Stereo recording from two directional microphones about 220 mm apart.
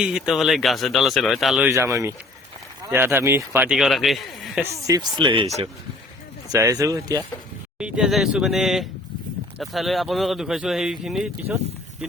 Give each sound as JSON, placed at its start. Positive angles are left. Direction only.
{"t": 0.0, "sound": "speech", "side_deg": -5}
{"t": 1.7, "sound": "speech", "side_deg": -15}
{"t": 4.9, "sound": "speech", "side_deg": -20}
{"t": 6.5, "sound": "speech", "side_deg": -15}
{"t": 7.8, "sound": "speech", "side_deg": -5}